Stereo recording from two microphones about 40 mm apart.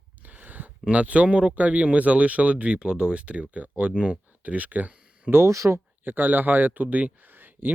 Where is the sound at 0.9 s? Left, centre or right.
Right.